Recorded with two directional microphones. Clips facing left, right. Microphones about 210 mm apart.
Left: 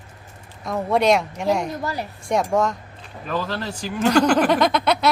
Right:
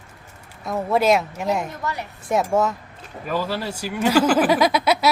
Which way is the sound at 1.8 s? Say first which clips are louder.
Left 2 dB; 35° left (ahead or behind).